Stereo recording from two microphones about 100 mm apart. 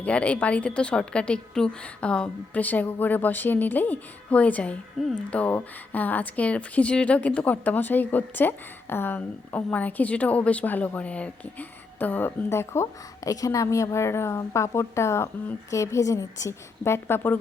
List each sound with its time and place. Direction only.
0.0 s a woman's voice: 15° left (ahead or behind)